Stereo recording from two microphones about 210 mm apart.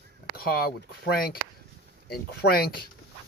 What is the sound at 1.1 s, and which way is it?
Speech, 45° left (ahead or behind).